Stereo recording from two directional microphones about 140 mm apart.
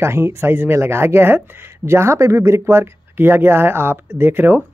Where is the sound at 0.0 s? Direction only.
20° right (ahead or behind).